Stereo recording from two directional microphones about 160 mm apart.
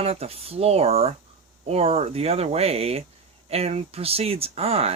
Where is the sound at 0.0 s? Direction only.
40° right (ahead or behind).